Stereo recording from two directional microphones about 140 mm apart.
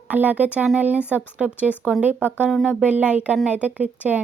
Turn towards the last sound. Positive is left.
turn(degrees=-10)  # may be behind; listen again after turning